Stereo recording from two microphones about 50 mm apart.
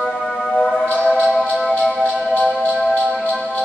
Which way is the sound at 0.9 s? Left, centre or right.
Left.